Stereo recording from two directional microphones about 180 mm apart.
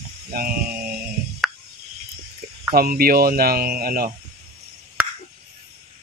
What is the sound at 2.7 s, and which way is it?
Speech, 55° right (ahead or behind).